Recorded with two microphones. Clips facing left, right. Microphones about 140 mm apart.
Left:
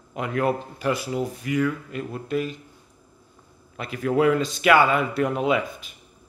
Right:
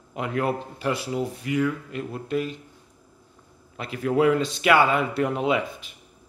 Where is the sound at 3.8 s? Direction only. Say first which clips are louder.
Even; 30° right (ahead or behind).